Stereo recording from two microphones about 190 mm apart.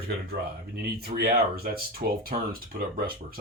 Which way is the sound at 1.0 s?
50° right (ahead or behind).